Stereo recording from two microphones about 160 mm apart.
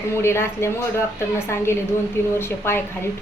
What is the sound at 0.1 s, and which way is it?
A woman's voice, 15° left (ahead or behind).